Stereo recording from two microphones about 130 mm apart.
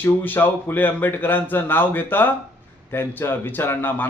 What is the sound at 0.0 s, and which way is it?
Speech, 15° left (ahead or behind).